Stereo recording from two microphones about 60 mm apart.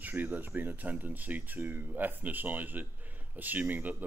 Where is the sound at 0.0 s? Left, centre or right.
Right.